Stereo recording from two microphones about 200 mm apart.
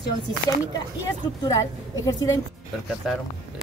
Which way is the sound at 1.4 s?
15° left (ahead or behind).